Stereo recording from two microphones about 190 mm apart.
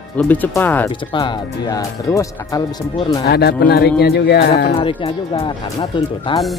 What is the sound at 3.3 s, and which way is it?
Speech, 60° left (ahead or behind).